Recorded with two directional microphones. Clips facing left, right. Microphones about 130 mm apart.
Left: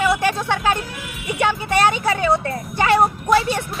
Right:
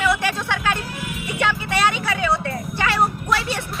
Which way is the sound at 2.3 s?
25° left (ahead or behind).